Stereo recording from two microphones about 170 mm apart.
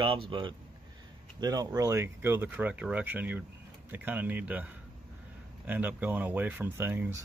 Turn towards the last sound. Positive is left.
turn(degrees=-15)  # may be behind; listen again after turning